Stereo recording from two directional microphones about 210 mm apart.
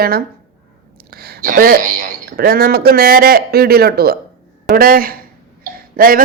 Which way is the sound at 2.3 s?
45° right (ahead or behind).